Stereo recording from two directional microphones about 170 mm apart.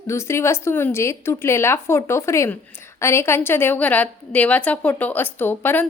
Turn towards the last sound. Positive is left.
turn(degrees=10)  # may be behind; listen again after turning